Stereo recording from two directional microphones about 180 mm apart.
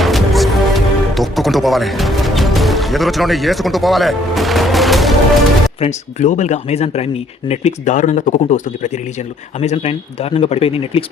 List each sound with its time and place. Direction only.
0.0 s music: centre (ahead or behind)
5.8 s speech: 40° left (ahead or behind)